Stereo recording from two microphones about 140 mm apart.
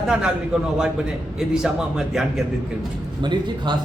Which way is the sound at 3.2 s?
35° right (ahead or behind).